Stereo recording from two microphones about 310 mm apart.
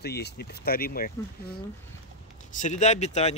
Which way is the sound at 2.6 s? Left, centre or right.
Left.